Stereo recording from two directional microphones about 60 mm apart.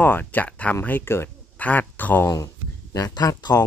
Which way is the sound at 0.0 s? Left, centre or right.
Left.